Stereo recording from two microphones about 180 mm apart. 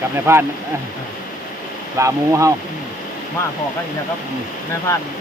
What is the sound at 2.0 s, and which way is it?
Speech, 15° right (ahead or behind).